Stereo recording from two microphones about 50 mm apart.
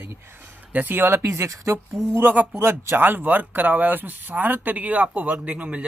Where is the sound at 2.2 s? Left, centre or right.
Right.